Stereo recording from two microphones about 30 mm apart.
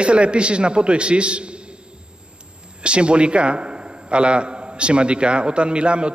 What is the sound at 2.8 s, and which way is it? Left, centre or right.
A man's voice, right.